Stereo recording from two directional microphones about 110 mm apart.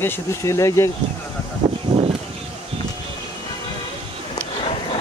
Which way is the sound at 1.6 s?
45° right (ahead or behind).